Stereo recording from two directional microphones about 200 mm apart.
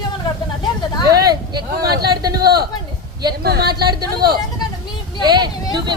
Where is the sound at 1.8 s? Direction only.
55° right (ahead or behind).